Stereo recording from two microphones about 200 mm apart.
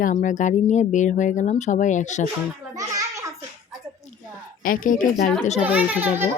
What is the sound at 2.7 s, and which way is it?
Speech, 15° right (ahead or behind).